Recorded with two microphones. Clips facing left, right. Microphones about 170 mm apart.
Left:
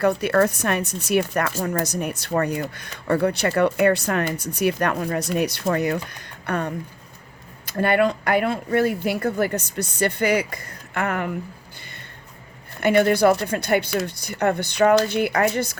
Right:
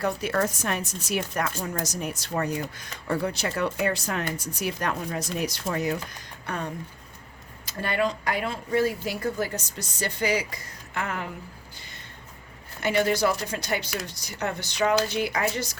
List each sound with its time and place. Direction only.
0.0 s speech: 65° left (ahead or behind)
11.8 s a sound: 60° left (ahead or behind)
12.8 s speech: 60° left (ahead or behind)